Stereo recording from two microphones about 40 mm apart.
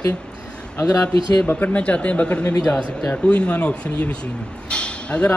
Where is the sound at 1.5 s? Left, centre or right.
Left.